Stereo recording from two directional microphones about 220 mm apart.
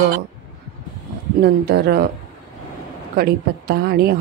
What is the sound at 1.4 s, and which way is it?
Speech, 45° right (ahead or behind).